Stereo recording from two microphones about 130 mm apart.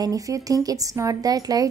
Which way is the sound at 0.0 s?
25° right (ahead or behind).